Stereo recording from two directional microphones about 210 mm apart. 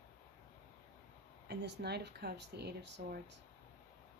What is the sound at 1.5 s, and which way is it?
Speech, 50° right (ahead or behind).